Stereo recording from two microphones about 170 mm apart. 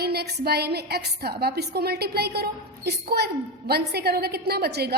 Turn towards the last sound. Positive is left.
turn(degrees=-70)  # may be behind; listen again after turning